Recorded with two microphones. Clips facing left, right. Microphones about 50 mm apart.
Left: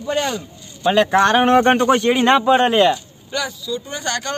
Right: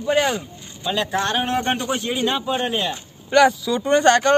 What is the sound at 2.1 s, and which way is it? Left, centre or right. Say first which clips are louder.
Speech: left 8 dB; left.